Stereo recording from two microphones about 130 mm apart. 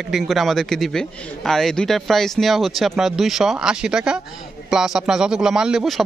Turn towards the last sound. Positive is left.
turn(degrees=0)  # may be behind; listen again after turning